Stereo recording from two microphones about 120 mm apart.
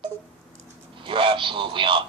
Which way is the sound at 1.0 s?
45° right (ahead or behind).